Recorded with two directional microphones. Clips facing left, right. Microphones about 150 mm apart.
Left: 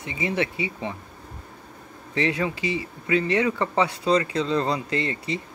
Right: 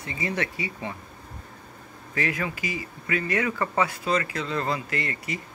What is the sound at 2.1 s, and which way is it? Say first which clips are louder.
Speech: left 4 dB; 25° left (ahead or behind).